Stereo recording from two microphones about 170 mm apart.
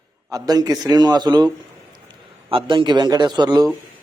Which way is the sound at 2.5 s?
30° right (ahead or behind).